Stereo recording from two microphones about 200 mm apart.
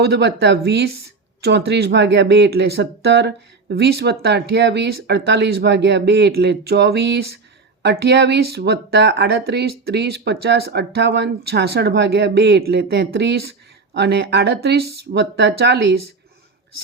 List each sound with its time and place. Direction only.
0.0 s speech: 55° right (ahead or behind)